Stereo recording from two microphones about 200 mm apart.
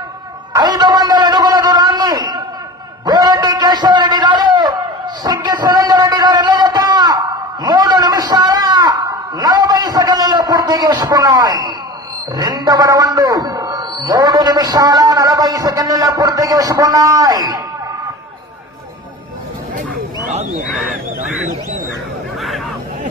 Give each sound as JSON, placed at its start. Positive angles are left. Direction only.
{"t": 0.6, "sound": "a sound", "side_deg": -20}
{"t": 12.4, "sound": "a man's voice", "side_deg": -20}
{"t": 20.7, "sound": "speech", "side_deg": 0}